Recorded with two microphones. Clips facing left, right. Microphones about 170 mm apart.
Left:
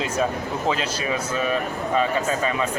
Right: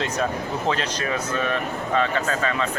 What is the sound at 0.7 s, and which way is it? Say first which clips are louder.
Speech: even; 10° left (ahead or behind).